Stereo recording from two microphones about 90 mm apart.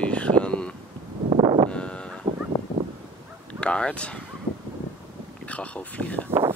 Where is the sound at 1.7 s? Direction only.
10° left (ahead or behind).